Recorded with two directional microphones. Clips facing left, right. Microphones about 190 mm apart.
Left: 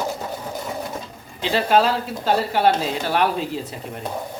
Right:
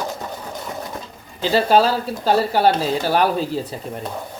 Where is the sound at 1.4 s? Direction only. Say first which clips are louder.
Right 3 dB; 35° right (ahead or behind).